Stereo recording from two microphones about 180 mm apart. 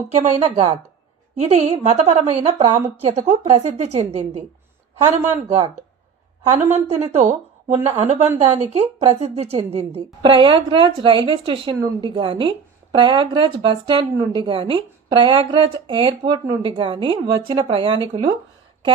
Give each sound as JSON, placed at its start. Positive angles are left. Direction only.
{"t": 0.1, "sound": "a woman's voice", "side_deg": -35}
{"t": 6.6, "sound": "a woman's voice", "side_deg": -10}
{"t": 6.8, "sound": "a woman's voice", "side_deg": -35}